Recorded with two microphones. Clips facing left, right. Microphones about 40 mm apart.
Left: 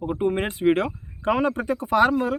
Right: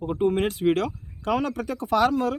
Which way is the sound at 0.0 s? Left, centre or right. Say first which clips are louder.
Right 1 dB; centre.